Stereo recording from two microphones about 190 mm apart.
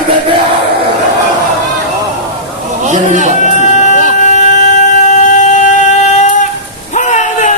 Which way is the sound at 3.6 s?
40° left (ahead or behind).